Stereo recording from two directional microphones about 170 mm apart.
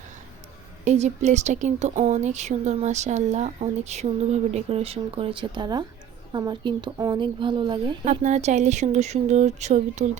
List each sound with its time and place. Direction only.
0.9 s a woman's voice: 40° right (ahead or behind); by 7.9 s 25° right (ahead or behind)
8.2 s speech: 40° right (ahead or behind)